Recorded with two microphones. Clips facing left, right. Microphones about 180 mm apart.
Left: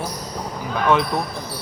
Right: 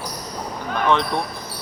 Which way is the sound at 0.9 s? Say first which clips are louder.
Left 2 dB; 5° left (ahead or behind).